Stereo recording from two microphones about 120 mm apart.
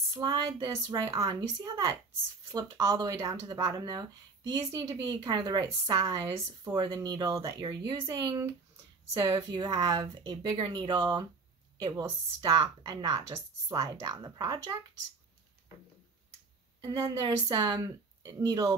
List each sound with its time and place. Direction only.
0.1 s speech: 35° right (ahead or behind)
17.5 s speech: 30° right (ahead or behind)